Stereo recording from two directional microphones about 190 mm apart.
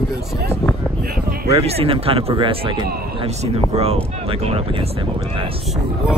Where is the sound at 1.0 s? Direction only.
50° right (ahead or behind).